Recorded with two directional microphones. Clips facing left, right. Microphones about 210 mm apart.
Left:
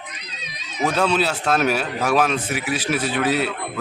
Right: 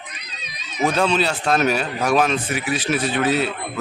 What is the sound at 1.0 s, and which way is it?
Speech, 5° left (ahead or behind).